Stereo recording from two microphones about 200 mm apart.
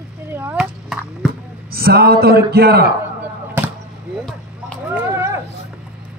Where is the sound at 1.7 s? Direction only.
50° right (ahead or behind).